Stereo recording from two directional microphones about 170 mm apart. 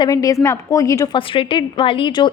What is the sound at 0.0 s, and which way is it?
A woman's voice, 20° left (ahead or behind).